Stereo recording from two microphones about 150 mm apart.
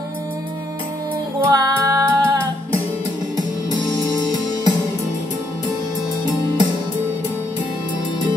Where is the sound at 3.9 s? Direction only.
25° left (ahead or behind).